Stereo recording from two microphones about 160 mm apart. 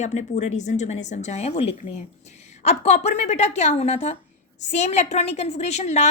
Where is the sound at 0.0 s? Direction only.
45° left (ahead or behind).